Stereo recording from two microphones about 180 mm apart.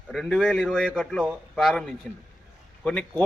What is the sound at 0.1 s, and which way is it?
A man's voice, centre (ahead or behind).